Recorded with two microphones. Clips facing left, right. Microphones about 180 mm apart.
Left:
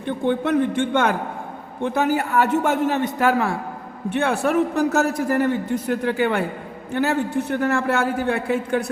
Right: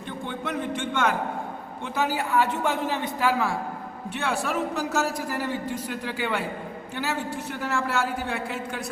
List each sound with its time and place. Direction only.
0.3 s a man's voice: 55° left (ahead or behind)